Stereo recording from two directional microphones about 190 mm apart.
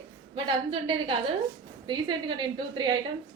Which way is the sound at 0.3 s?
25° right (ahead or behind).